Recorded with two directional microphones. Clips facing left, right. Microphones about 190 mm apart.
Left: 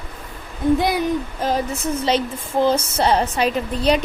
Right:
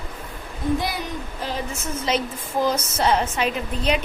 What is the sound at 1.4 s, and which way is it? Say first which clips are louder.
Speech: left 6 dB; 40° left (ahead or behind).